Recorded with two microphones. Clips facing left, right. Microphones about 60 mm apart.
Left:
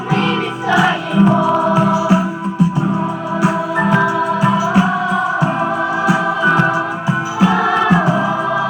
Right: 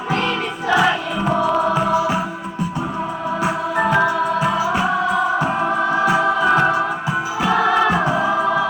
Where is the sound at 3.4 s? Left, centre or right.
Centre.